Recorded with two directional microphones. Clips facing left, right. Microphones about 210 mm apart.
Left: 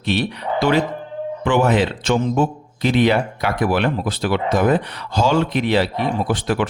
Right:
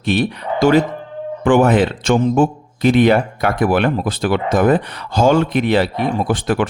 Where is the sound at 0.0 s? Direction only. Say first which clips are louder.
Right 3 dB; 50° right (ahead or behind).